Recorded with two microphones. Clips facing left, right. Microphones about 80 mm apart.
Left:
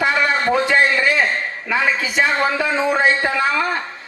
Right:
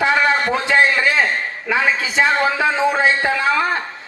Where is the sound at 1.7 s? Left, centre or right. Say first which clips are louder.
Right 1 dB; right.